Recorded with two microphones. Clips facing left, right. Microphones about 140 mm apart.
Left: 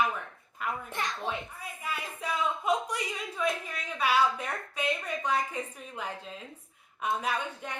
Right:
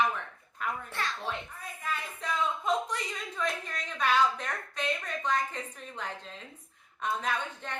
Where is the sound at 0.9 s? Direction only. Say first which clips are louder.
Left 1 dB; 20° left (ahead or behind).